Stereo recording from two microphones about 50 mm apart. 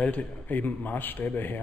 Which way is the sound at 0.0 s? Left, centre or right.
Left.